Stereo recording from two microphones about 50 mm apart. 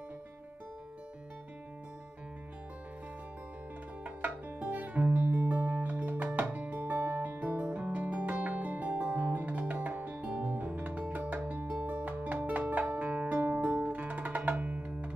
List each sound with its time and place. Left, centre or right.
4.0 s music: right